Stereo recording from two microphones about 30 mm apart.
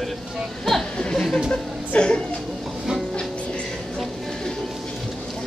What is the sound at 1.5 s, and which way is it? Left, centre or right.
Speech, left.